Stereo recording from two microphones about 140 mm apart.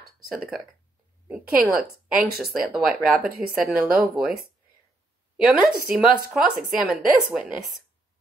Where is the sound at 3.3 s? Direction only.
90° right.